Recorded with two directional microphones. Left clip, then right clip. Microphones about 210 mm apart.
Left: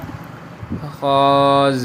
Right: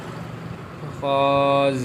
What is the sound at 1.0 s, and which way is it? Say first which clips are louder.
Speech: left 5 dB; 25° left (ahead or behind).